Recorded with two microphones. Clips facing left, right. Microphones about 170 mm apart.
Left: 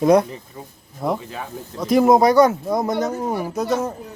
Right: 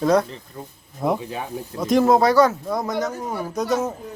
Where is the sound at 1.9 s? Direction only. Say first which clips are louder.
Left 2 dB; 10° left (ahead or behind).